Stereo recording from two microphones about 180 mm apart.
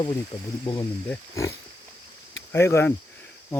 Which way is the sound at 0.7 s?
30° left (ahead or behind).